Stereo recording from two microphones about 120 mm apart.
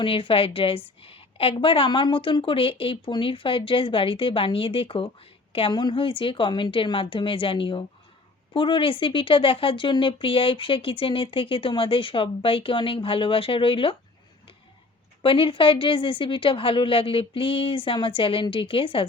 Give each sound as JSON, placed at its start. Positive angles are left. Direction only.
{"t": 0.0, "sound": "speech", "side_deg": 50}
{"t": 15.2, "sound": "speech", "side_deg": 45}